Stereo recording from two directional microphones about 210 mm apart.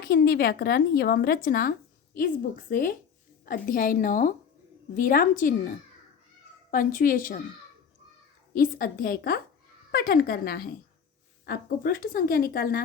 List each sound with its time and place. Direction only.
0.1 s a woman's voice: 45° left (ahead or behind)
6.7 s a woman's voice: 40° left (ahead or behind)
8.5 s a woman's voice: 40° left (ahead or behind)